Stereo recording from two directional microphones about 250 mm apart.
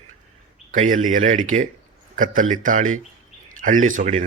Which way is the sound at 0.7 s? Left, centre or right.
Right.